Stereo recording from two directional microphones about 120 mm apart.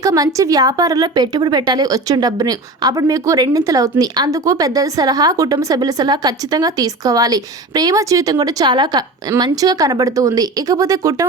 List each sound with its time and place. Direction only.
0.0 s a woman's voice: 30° right (ahead or behind)